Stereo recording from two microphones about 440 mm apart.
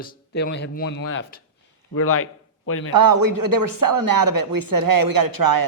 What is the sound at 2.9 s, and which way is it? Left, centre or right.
Speech, right.